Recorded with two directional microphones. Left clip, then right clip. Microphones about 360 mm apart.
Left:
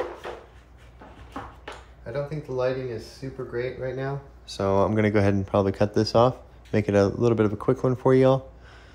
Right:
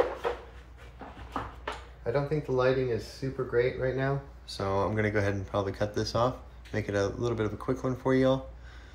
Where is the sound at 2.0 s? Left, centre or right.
Centre.